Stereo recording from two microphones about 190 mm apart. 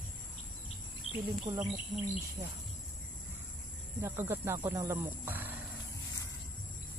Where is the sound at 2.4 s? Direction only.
20° right (ahead or behind).